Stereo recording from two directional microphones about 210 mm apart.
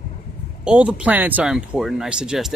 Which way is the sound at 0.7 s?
5° right (ahead or behind).